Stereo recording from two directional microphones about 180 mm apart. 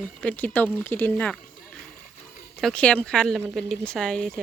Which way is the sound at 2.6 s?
5° left (ahead or behind).